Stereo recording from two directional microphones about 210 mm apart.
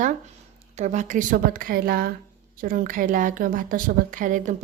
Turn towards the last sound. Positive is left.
turn(degrees=-40)  # may be behind; listen again after turning